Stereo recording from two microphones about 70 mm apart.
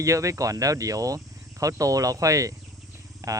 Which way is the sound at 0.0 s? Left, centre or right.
Right.